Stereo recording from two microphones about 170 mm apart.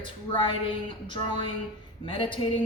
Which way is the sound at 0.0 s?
30° left (ahead or behind).